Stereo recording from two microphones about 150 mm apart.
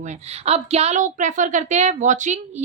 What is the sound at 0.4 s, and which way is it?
A woman's voice, 45° right (ahead or behind).